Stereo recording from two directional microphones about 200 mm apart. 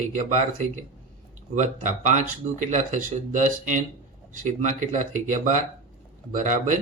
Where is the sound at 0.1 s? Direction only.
40° right (ahead or behind).